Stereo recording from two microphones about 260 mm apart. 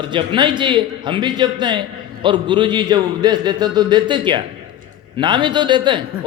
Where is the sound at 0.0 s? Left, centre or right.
Centre.